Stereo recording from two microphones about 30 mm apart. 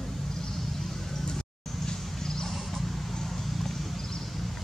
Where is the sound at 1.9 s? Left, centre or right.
Left.